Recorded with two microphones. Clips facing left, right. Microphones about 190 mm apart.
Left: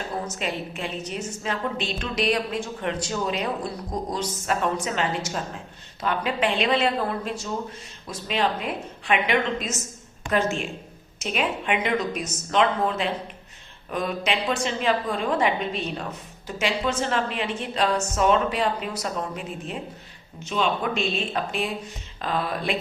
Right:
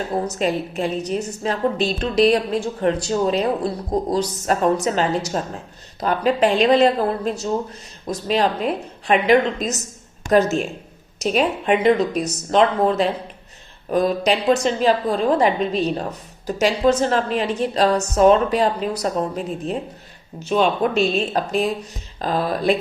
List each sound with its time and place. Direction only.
0.3 s a woman's voice: 40° right (ahead or behind)